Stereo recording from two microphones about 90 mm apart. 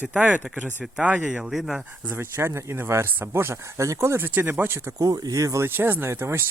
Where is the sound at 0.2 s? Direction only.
15° right (ahead or behind).